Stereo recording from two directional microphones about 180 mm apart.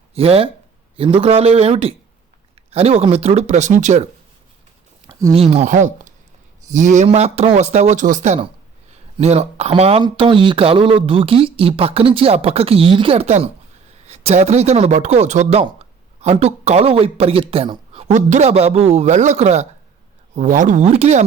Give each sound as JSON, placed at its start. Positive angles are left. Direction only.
{"t": 0.1, "sound": "speech", "side_deg": -30}
{"t": 5.3, "sound": "speech", "side_deg": -35}
{"t": 18.1, "sound": "speech", "side_deg": -40}